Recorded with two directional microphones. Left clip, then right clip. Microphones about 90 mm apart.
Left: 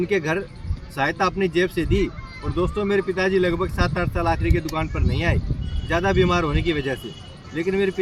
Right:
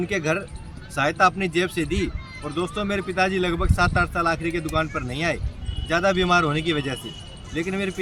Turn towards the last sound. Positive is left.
turn(degrees=-35)  # may be behind; listen again after turning